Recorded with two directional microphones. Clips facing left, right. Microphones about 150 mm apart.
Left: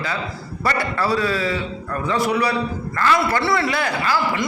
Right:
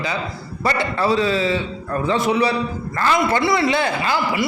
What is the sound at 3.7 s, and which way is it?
Speech, 25° right (ahead or behind).